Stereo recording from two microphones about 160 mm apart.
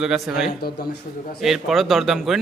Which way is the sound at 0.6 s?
75° left (ahead or behind).